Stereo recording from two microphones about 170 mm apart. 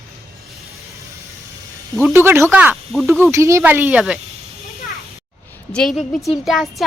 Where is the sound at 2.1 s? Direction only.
15° right (ahead or behind).